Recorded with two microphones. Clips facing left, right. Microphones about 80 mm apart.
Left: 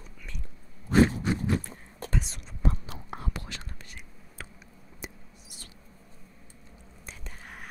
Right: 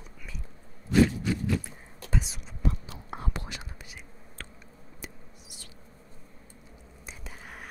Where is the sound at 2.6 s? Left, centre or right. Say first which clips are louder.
Left 1 dB; left.